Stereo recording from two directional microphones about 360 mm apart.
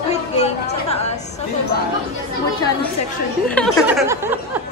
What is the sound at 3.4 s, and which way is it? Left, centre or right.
Speech, centre.